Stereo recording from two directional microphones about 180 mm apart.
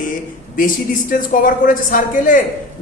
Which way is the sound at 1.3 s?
50° left (ahead or behind).